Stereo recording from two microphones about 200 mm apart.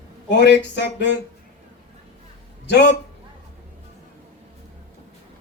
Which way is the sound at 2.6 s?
60° left (ahead or behind).